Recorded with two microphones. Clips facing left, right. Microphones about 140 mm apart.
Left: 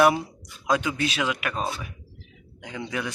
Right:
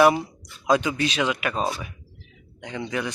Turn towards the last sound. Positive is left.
turn(degrees=0)  # may be behind; listen again after turning